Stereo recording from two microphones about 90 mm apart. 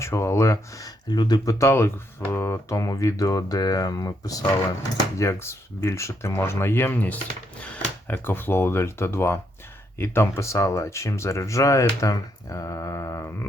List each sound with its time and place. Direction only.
0.0 s speech: 30° left (ahead or behind); by 1.5 s 50° left (ahead or behind)
1.5 s speech: 30° left (ahead or behind)